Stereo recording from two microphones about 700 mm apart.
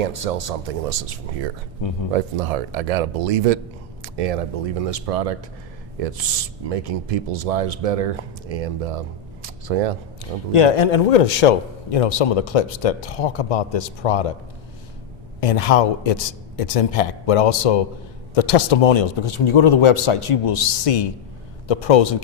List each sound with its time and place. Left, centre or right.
0.0 s speech: right
1.8 s speech: left
2.1 s speech: right
10.5 s a man's voice: left
15.4 s a man's voice: left